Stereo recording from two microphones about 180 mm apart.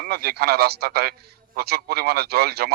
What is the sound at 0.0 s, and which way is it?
Speech, 60° right (ahead or behind).